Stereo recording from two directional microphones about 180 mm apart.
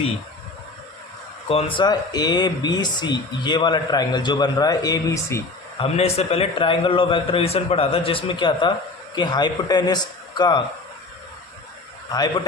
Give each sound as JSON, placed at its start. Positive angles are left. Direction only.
{"t": 1.5, "sound": "speech", "side_deg": 30}
{"t": 5.8, "sound": "a man's voice", "side_deg": 35}